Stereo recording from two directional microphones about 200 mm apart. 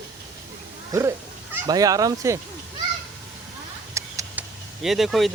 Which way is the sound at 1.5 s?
15° right (ahead or behind).